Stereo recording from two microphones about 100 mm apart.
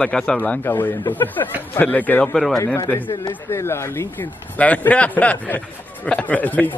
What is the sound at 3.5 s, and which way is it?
Speech, 25° left (ahead or behind).